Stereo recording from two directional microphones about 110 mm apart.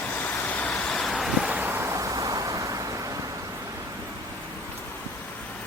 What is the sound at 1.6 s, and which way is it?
Vehicle, 25° right (ahead or behind).